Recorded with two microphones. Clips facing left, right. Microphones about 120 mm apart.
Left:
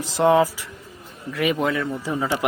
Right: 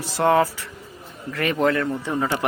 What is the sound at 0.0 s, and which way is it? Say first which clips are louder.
Speech: left 1 dB; 20° left (ahead or behind).